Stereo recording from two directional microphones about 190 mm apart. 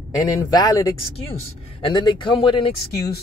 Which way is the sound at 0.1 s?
20° left (ahead or behind).